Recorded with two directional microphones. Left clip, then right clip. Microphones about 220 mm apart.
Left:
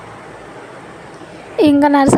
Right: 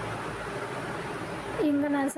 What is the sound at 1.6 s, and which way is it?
Speech, 45° left (ahead or behind).